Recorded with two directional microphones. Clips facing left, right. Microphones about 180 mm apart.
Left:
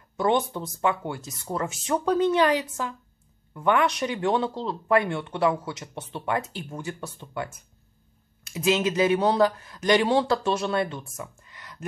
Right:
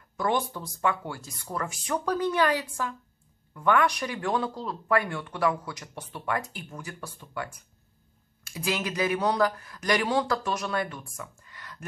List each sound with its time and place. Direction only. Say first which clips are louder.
0.2 s speech: left 4 dB; 25° left (ahead or behind)